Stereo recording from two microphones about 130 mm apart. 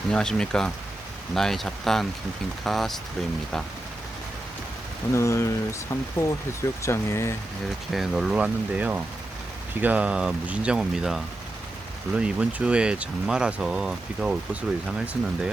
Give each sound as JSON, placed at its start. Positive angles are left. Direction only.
{"t": 0.1, "sound": "speech", "side_deg": 5}
{"t": 5.1, "sound": "speech", "side_deg": 20}
{"t": 7.9, "sound": "speech", "side_deg": 0}